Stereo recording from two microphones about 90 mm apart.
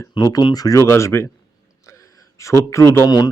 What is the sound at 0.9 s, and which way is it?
Speech, 30° left (ahead or behind).